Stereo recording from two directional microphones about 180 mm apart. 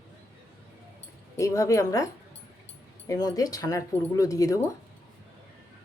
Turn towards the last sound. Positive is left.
turn(degrees=20)  # may be behind; listen again after turning